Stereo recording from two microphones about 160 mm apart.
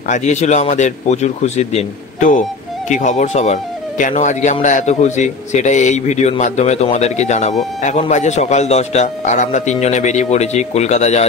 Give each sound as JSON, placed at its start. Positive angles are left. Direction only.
{"t": 0.1, "sound": "speech", "side_deg": 45}